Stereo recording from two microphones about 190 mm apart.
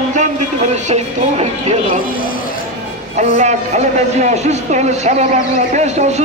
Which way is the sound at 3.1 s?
40° right (ahead or behind).